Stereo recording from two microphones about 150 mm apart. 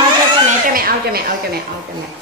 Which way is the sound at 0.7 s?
80° right.